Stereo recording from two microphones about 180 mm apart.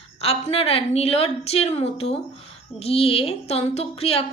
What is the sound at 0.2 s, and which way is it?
Speech, 35° left (ahead or behind).